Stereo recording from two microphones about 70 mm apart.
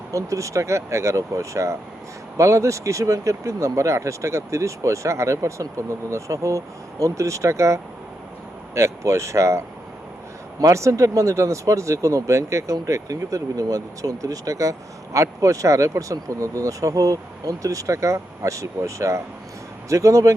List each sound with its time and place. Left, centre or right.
0.1 s speech: right